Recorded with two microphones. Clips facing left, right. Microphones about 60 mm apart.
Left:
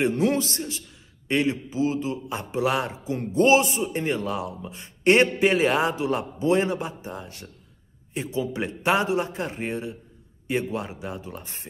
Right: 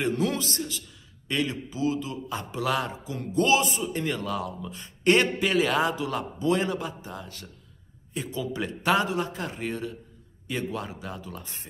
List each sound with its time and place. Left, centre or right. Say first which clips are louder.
0.0 s a man's voice: left 4 dB; left